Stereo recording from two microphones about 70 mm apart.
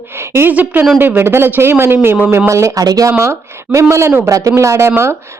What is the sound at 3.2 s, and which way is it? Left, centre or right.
A woman's voice, right.